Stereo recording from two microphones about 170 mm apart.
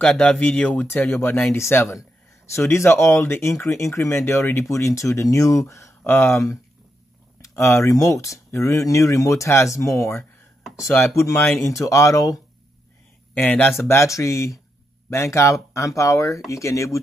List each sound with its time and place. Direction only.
0.0 s speech: 5° left (ahead or behind)